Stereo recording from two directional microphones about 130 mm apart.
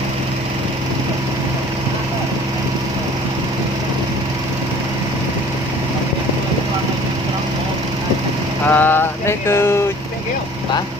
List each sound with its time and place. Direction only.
8.6 s mantra: 15° left (ahead or behind)